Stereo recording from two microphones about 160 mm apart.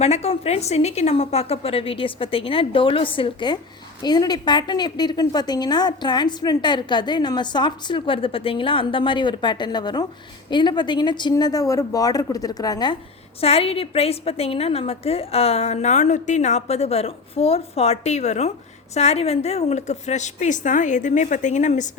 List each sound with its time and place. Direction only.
0.0 s a woman's voice: 40° left (ahead or behind); by 13.0 s 25° left (ahead or behind)
13.4 s a woman's voice: 40° left (ahead or behind)